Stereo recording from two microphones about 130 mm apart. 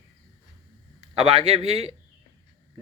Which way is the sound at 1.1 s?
50° right (ahead or behind).